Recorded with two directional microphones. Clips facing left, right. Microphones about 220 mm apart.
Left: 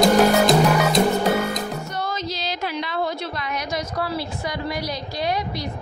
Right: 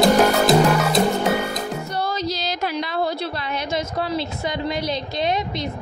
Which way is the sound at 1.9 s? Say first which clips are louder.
Right 3 dB; 35° right (ahead or behind).